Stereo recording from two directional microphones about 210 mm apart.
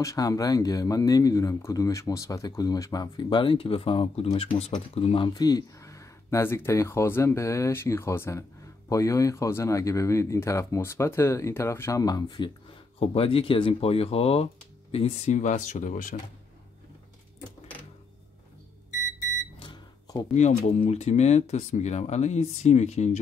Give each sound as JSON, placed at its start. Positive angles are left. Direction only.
{"t": 0.0, "sound": "speech", "side_deg": 15}
{"t": 19.6, "sound": "microwave oven", "side_deg": 20}
{"t": 20.3, "sound": "speech", "side_deg": 35}